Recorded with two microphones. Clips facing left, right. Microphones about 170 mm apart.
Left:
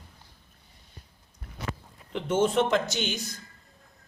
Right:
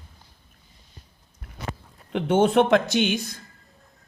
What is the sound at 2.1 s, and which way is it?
A man's voice, 65° right (ahead or behind).